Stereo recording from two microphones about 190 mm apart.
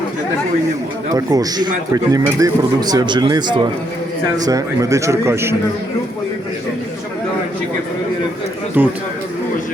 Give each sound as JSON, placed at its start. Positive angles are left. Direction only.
{"t": 1.1, "sound": "a man's voice", "side_deg": -20}
{"t": 8.8, "sound": "a man's voice", "side_deg": -10}